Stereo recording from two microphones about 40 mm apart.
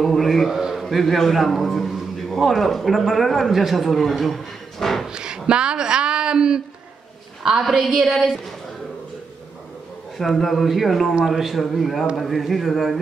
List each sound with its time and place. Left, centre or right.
0.0 s a man's voice: centre
0.5 s a sound: centre
0.7 s a man's voice: centre
5.0 s a sound: centre
7.9 s a woman's voice: centre
10.2 s a man's voice: centre